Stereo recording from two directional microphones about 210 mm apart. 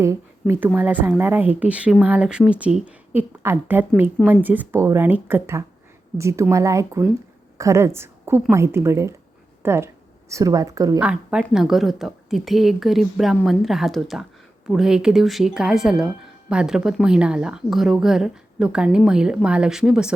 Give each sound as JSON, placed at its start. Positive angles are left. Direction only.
{"t": 0.0, "sound": "a woman's voice", "side_deg": -10}
{"t": 11.0, "sound": "speech", "side_deg": -5}